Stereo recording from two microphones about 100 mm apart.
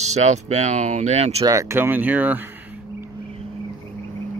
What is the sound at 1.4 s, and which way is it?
Speech, 35° right (ahead or behind).